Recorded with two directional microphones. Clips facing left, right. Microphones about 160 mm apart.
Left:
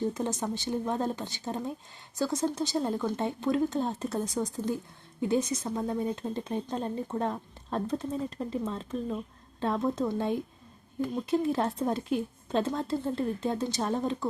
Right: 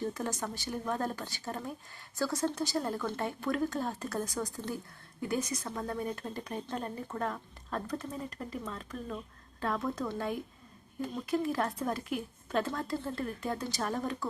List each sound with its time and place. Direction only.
0.0 s speech: 20° left (ahead or behind)